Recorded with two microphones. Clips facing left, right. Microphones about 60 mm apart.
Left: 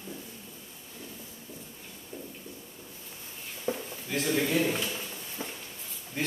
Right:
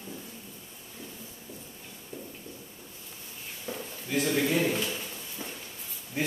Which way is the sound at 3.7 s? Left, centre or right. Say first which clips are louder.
Right 2 dB; centre.